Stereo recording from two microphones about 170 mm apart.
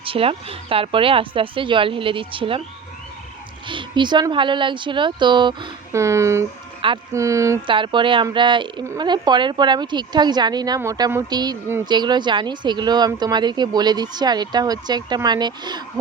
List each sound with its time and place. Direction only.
0.0 s speech: 35° right (ahead or behind)
3.7 s speech: 30° right (ahead or behind)
5.9 s speech: 15° right (ahead or behind)
7.7 s speech: 30° right (ahead or behind)